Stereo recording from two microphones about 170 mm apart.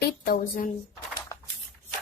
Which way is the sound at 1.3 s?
20° left (ahead or behind).